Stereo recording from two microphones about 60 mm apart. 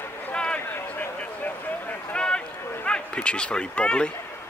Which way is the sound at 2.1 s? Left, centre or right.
Centre.